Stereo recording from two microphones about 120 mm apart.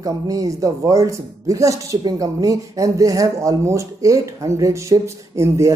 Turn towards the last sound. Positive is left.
turn(degrees=-25)  # may be behind; listen again after turning